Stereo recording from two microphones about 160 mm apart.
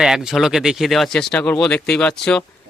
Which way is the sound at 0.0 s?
5° right (ahead or behind).